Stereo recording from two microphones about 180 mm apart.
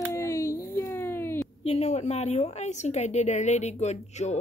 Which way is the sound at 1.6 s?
35° left (ahead or behind).